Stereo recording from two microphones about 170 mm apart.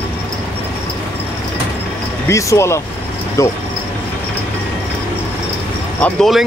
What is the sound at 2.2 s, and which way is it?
Speech, 15° left (ahead or behind).